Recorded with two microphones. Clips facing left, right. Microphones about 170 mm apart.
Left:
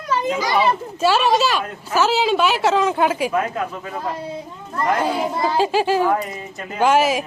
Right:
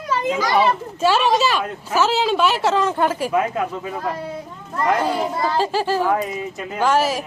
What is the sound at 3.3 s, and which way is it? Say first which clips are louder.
Speech: right 2 dB; 15° right (ahead or behind).